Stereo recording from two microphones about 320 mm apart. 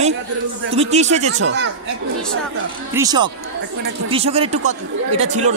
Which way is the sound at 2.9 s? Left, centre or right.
Centre.